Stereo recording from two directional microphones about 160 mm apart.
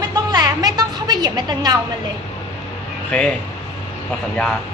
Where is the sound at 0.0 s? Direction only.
25° right (ahead or behind).